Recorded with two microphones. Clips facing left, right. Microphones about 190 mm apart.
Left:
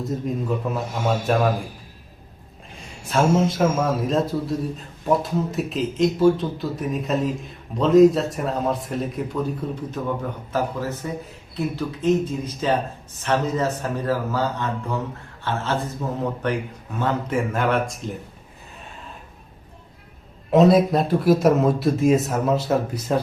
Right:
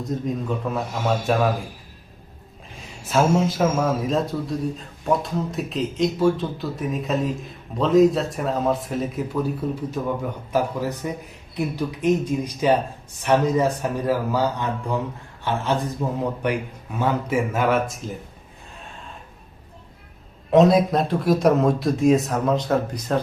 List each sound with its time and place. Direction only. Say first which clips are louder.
0.0 s speech: even; 5° left (ahead or behind)
3.1 s a man's voice: even; centre (ahead or behind)
20.5 s speech: even; centre (ahead or behind)